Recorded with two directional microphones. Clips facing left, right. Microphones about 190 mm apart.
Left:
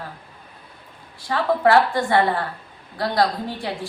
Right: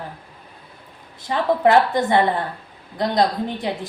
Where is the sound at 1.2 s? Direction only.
20° right (ahead or behind).